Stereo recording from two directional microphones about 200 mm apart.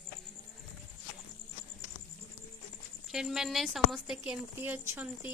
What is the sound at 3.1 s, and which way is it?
Speech, centre (ahead or behind).